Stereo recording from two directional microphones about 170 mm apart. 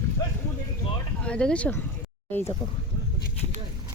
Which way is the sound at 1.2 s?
5° left (ahead or behind).